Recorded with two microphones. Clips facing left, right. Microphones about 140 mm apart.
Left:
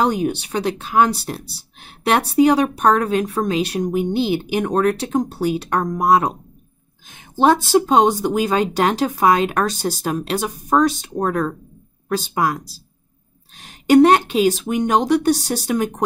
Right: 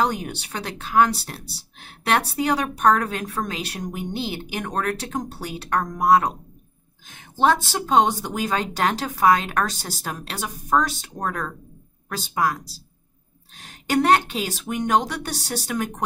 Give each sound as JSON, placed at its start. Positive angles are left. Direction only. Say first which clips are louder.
{"t": 0.0, "sound": "a woman's voice", "louder": "left 5 dB", "side_deg": 20}